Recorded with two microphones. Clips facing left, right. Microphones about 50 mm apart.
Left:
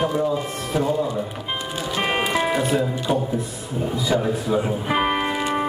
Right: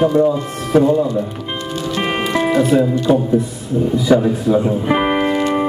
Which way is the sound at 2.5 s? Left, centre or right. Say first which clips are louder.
Right 8 dB; centre.